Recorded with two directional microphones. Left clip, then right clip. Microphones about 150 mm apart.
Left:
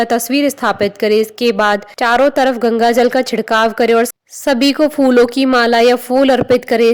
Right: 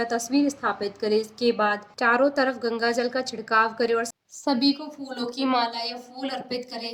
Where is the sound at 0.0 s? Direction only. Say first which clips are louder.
Left 11 dB; 40° left (ahead or behind).